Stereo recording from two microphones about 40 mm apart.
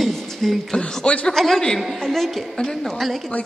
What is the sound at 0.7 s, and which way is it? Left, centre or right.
Speech, left.